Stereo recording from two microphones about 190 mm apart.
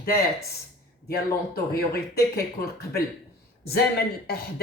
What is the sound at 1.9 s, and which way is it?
Speech, 55° left (ahead or behind).